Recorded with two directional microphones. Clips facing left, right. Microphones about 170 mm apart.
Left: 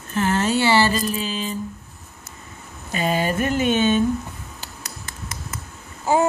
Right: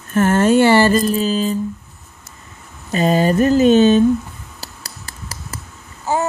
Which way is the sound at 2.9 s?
35° right (ahead or behind).